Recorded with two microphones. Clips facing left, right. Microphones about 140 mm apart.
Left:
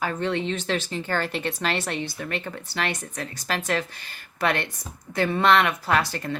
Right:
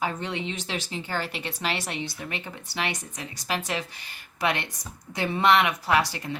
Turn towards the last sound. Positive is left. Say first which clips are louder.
# even
turn(degrees=-15)  # may be behind; listen again after turning